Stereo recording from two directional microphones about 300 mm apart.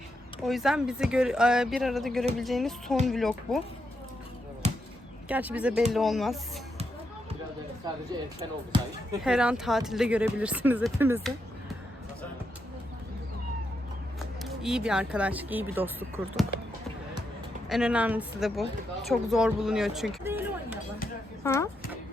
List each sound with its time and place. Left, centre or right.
0.4 s speech: centre
4.6 s basketball bounce: right
5.3 s speech: centre
9.2 s speech: centre
14.4 s speech: centre
17.7 s speech: centre
21.4 s speech: centre